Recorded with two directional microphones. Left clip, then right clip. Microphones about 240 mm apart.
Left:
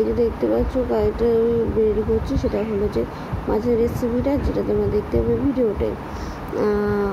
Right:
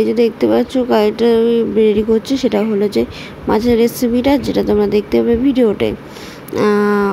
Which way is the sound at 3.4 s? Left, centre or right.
Right.